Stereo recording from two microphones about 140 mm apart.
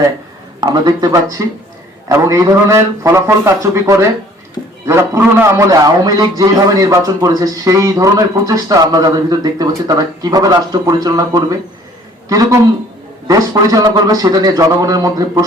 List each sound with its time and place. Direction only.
0.6 s a man's voice: 30° right (ahead or behind)